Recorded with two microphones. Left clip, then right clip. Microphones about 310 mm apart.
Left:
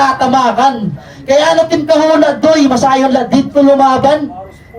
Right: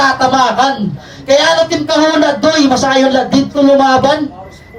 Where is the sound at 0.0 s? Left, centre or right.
Left.